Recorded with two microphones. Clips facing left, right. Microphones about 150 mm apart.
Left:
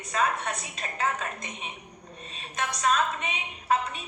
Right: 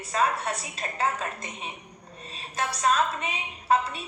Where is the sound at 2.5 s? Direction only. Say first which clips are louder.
Right 1 dB; 30° right (ahead or behind).